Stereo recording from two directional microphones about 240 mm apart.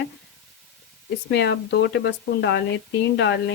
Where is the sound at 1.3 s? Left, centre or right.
Left.